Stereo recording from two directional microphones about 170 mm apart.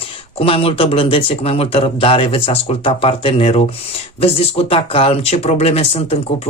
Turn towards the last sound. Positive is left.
turn(degrees=35)  # may be behind; listen again after turning